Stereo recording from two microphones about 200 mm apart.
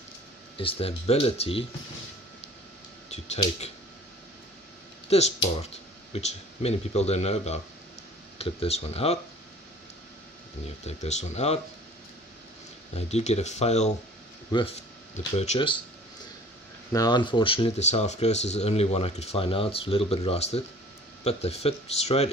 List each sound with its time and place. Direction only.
0.6 s speech: 30° left (ahead or behind)
5.1 s speech: 30° left (ahead or behind)
10.9 s speech: 35° left (ahead or behind)
12.9 s speech: 35° left (ahead or behind)
14.5 s speech: 20° left (ahead or behind)
15.1 s speech: 35° left (ahead or behind)
16.9 s speech: 20° left (ahead or behind)